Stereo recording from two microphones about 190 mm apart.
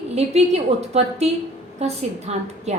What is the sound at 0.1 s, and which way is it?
A woman's voice, 35° right (ahead or behind).